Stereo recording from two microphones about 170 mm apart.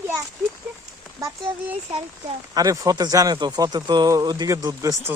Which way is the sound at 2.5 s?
20° right (ahead or behind).